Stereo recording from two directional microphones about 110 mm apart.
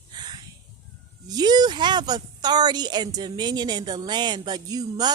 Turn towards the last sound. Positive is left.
turn(degrees=-35)  # may be behind; listen again after turning